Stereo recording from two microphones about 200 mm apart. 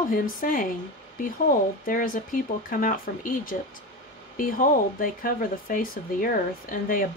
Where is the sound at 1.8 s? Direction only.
45° left (ahead or behind).